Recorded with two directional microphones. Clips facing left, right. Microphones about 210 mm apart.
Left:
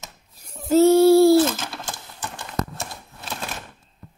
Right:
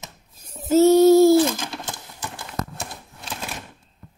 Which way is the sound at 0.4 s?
20° right (ahead or behind).